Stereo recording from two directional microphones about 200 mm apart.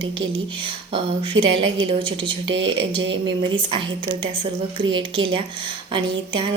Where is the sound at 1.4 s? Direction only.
25° right (ahead or behind).